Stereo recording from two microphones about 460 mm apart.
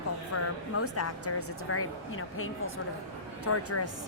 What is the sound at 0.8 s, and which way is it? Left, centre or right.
A woman's voice, left.